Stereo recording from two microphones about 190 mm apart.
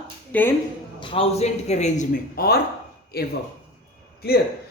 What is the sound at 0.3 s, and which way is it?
Speech, 10° left (ahead or behind).